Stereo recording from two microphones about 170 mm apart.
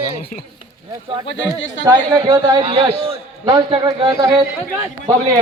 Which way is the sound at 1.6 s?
90° left.